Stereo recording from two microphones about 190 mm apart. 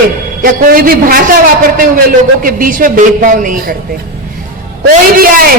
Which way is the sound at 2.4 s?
45° right (ahead or behind).